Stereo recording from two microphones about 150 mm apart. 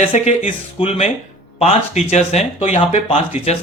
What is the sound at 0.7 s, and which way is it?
Speech, 40° left (ahead or behind).